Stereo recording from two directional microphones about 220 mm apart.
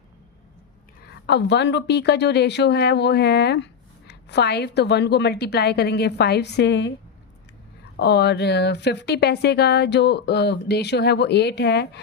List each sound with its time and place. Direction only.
1.0 s a woman's voice: 50° left (ahead or behind)
7.9 s a woman's voice: 50° left (ahead or behind)